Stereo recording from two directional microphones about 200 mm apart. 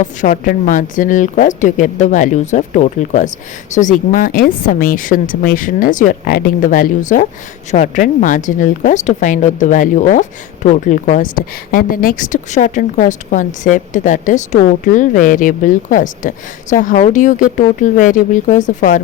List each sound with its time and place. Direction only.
0.0 s a woman's voice: 40° left (ahead or behind)